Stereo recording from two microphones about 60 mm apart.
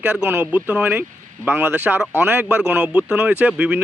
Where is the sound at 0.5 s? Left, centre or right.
Right.